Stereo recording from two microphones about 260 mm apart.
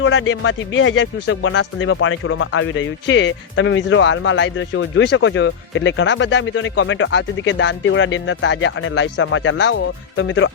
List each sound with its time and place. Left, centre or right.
0.0 s speech: left